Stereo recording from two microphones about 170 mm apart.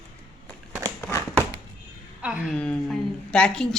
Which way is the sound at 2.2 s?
5° right (ahead or behind).